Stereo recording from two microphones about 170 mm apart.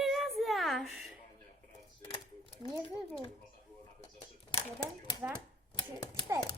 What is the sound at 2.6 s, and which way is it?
Speech, 25° left (ahead or behind).